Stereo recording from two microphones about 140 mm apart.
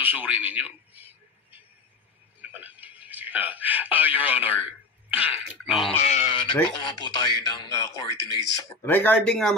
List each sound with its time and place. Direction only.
0.0 s a sound: 15° right (ahead or behind)
2.4 s speech: 10° right (ahead or behind)
6.0 s speech: 50° left (ahead or behind); by 9.6 s 5° left (ahead or behind)